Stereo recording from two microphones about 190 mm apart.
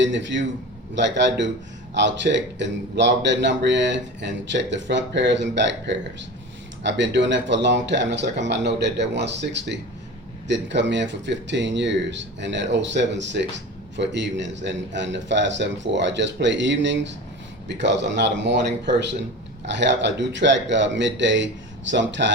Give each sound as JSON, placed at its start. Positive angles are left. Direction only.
{"t": 0.0, "sound": "a man's voice", "side_deg": -70}